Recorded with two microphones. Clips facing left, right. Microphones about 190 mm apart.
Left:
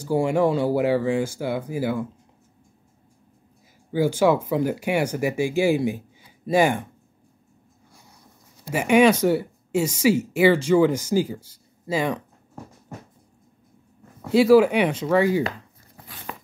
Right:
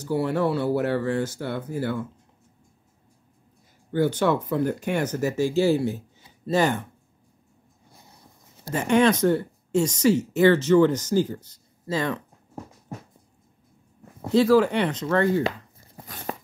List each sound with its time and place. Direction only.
0.0 s speech: 10° left (ahead or behind)
3.9 s speech: 10° left (ahead or behind)
8.6 s speech: 10° left (ahead or behind)
14.3 s speech: 10° left (ahead or behind)
16.3 s a sound: 40° right (ahead or behind)